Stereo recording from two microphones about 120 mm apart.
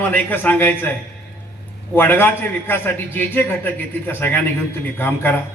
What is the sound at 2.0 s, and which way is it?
A man's voice, 20° left (ahead or behind).